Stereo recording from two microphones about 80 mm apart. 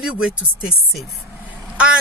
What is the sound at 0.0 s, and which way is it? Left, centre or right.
Speech, centre.